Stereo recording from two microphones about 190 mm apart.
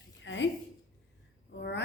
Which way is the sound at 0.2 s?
70° left (ahead or behind).